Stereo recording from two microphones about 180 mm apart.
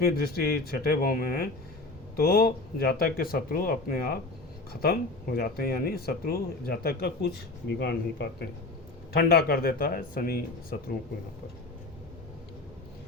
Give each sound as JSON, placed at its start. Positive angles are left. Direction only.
{"t": 0.0, "sound": "speech", "side_deg": 60}